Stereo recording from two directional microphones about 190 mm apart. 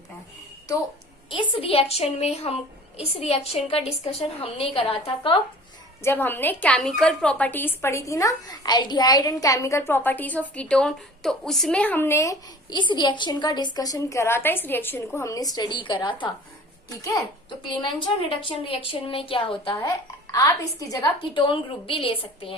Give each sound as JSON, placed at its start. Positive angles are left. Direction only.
{"t": 1.3, "sound": "a woman's voice", "side_deg": 30}
{"t": 6.0, "sound": "a woman's voice", "side_deg": 10}
{"t": 17.7, "sound": "a woman's voice", "side_deg": 25}